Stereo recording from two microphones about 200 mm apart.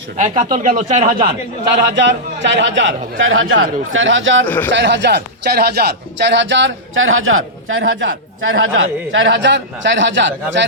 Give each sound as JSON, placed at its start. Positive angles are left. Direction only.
{"t": 0.2, "sound": "speech", "side_deg": -35}
{"t": 2.0, "sound": "a man's voice", "side_deg": -60}
{"t": 4.4, "sound": "speech", "side_deg": 10}
{"t": 4.7, "sound": "speech", "side_deg": -60}
{"t": 7.9, "sound": "a man's voice", "side_deg": -70}
{"t": 8.4, "sound": "a man's voice", "side_deg": -90}